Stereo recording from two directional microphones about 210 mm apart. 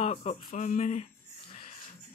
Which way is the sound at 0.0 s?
30° left (ahead or behind).